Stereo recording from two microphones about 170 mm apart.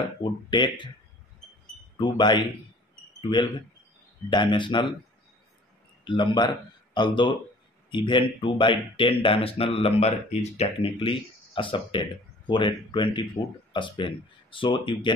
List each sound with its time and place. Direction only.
0.2 s speech: 30° left (ahead or behind)
2.1 s speech: 25° left (ahead or behind)
6.0 s speech: 30° left (ahead or behind)